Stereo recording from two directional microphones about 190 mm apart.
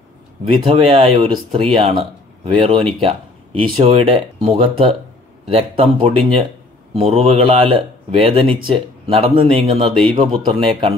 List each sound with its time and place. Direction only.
0.6 s speech: 30° right (ahead or behind)